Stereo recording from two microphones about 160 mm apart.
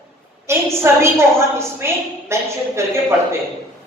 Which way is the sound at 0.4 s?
15° right (ahead or behind).